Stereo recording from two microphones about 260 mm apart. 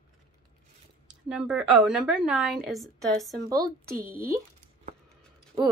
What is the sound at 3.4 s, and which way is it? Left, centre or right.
Speech, centre.